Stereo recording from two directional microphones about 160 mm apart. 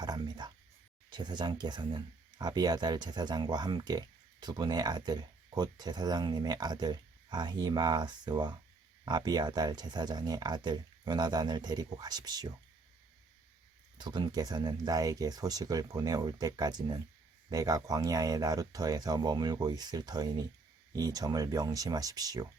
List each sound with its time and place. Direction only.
0.0 s a sound: 25° right (ahead or behind)
1.1 s speech: 25° right (ahead or behind)
14.0 s speech: 25° right (ahead or behind)